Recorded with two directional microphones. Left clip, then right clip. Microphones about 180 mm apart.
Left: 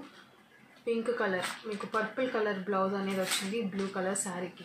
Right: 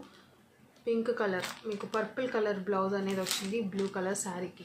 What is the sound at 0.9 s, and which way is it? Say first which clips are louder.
Speech: even; 20° right (ahead or behind).